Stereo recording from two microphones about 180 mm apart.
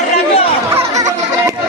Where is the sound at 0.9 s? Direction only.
20° right (ahead or behind).